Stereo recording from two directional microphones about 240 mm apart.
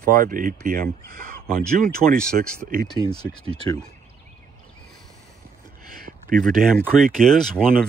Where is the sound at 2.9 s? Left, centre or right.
Centre.